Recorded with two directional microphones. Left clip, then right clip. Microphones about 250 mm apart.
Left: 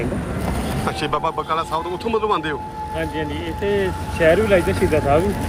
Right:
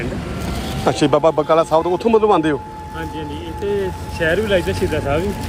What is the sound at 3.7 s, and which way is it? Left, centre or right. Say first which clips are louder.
Speech: even; centre.